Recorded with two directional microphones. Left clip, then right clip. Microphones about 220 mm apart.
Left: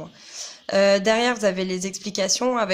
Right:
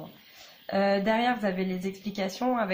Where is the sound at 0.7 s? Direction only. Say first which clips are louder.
Left 7 dB; 50° left (ahead or behind).